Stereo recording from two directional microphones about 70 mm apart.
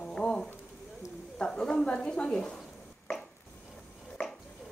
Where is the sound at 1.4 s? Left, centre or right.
Centre.